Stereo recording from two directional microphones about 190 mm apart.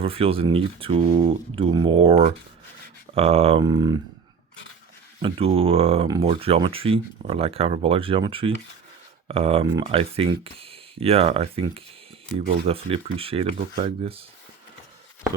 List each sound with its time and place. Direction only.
0.0 s speech: 30° right (ahead or behind)
5.2 s speech: 30° right (ahead or behind)